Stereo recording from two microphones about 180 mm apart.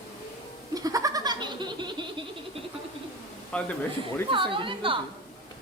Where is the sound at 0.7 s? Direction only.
20° right (ahead or behind).